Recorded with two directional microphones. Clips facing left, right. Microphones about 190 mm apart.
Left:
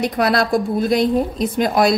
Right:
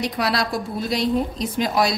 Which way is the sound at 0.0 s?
50° left (ahead or behind).